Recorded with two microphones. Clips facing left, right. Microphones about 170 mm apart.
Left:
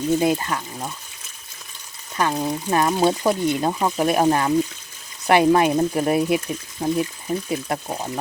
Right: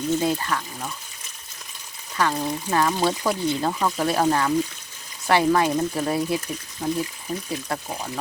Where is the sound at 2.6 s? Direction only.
20° left (ahead or behind).